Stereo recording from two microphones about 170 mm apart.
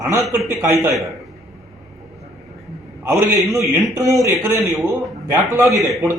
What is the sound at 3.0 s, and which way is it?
Speech, 15° right (ahead or behind).